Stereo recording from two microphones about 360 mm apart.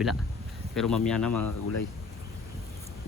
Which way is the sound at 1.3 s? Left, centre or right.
Left.